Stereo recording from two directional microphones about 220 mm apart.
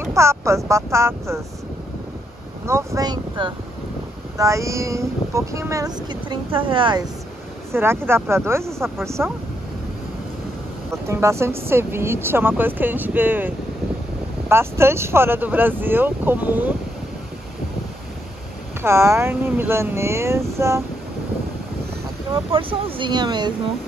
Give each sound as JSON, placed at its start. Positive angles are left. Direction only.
{"t": 0.0, "sound": "speech", "side_deg": -10}
{"t": 2.6, "sound": "speech", "side_deg": -15}
{"t": 7.7, "sound": "speech", "side_deg": -10}
{"t": 10.9, "sound": "speech", "side_deg": -10}
{"t": 14.5, "sound": "speech", "side_deg": -10}
{"t": 18.8, "sound": "speech", "side_deg": -10}
{"t": 22.3, "sound": "speech", "side_deg": -25}